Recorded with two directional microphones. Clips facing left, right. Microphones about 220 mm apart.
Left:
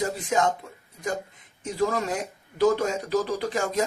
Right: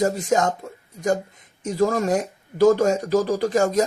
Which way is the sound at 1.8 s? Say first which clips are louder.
Right 6 dB; 45° right (ahead or behind).